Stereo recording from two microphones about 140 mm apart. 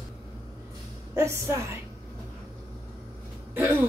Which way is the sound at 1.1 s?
20° right (ahead or behind).